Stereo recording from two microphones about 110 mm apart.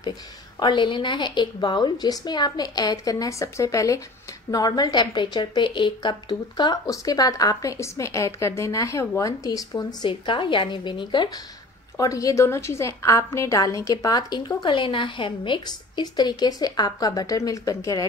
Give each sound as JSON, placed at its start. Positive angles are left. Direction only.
{"t": 0.6, "sound": "a woman's voice", "side_deg": 45}